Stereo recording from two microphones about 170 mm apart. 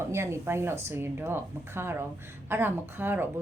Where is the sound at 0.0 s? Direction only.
15° right (ahead or behind).